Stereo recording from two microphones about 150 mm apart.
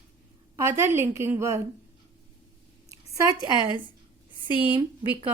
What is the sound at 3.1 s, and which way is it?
Speech, 25° right (ahead or behind).